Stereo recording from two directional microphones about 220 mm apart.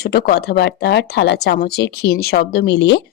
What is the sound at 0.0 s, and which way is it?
Speech, 45° left (ahead or behind).